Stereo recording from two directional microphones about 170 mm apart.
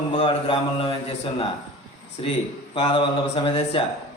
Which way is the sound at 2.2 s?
30° left (ahead or behind).